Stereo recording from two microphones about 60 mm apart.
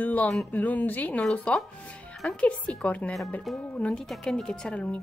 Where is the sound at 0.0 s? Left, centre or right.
Left.